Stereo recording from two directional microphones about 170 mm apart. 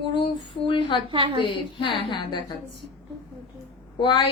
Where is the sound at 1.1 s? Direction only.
30° right (ahead or behind).